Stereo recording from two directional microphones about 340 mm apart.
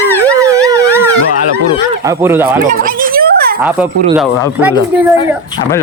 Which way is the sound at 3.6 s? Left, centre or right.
Centre.